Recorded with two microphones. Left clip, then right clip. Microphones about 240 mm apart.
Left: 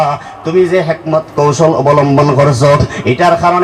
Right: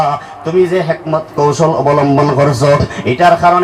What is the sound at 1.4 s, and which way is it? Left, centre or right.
Speech, left.